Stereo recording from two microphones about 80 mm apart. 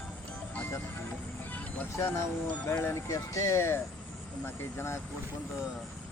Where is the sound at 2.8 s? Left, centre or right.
Left.